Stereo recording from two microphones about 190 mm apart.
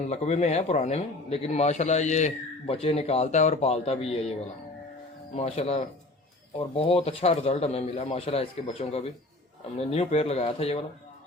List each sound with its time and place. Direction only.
0.1 s a man's voice: 35° left (ahead or behind)
5.3 s a man's voice: 35° left (ahead or behind)